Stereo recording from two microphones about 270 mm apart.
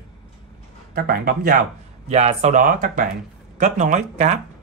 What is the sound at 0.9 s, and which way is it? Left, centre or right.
Speech, right.